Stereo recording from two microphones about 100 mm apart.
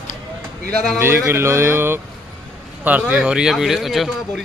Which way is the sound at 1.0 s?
25° right (ahead or behind).